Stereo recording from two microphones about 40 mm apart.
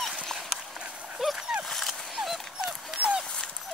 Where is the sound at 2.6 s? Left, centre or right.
Right.